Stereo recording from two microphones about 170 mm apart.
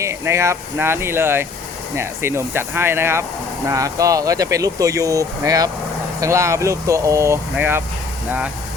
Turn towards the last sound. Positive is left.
turn(degrees=-10)  # may be behind; listen again after turning